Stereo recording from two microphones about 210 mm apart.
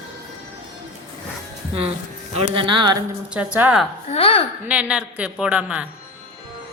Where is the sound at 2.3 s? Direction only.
25° right (ahead or behind).